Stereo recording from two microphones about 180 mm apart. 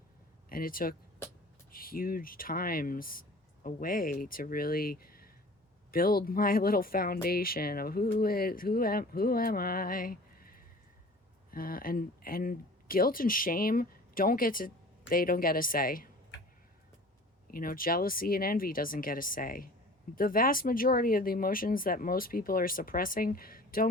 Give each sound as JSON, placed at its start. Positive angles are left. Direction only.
{"t": 0.5, "sound": "speech", "side_deg": 50}
{"t": 17.5, "sound": "speech", "side_deg": 55}